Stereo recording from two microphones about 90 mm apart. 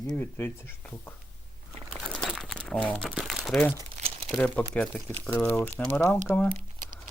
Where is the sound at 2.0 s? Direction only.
5° left (ahead or behind).